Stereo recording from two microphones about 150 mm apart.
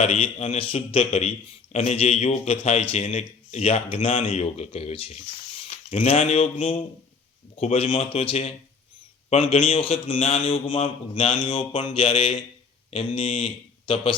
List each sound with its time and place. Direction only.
0.0 s a man's voice: 40° left (ahead or behind)